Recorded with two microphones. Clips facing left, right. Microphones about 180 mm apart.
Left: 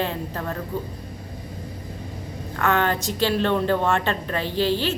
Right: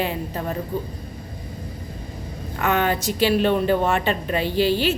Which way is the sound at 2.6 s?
15° right (ahead or behind).